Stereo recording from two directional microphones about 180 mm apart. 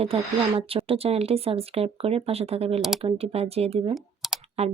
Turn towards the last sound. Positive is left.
turn(degrees=-35)  # may be behind; listen again after turning